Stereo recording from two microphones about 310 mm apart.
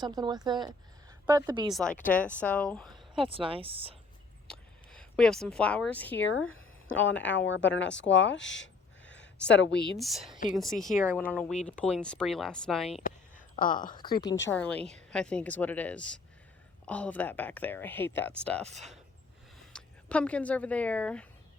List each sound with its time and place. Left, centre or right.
0.0 s speech: centre
1.7 s speech: centre
2.9 s speech: centre
4.4 s a sound: centre
6.2 s speech: left
10.0 s speech: centre
13.0 s a sound: left
14.0 s speech: centre
19.7 s speech: centre